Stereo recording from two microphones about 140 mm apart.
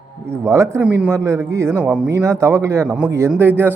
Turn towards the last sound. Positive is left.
turn(degrees=-15)  # may be behind; listen again after turning